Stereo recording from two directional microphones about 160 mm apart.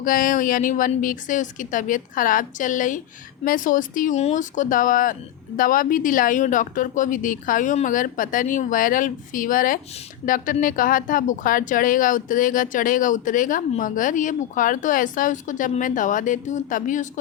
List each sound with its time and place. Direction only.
0.0 s a woman's voice: 60° left (ahead or behind)